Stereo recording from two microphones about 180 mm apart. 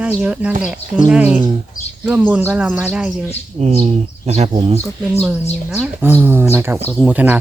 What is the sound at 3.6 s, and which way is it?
Speech, 35° right (ahead or behind).